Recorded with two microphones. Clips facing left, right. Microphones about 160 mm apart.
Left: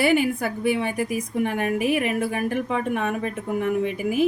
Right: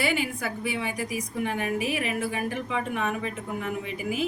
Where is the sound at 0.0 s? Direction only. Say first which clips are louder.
Left 7 dB; 55° left (ahead or behind).